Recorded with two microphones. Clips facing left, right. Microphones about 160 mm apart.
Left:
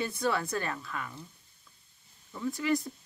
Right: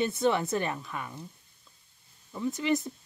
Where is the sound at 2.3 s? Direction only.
20° right (ahead or behind).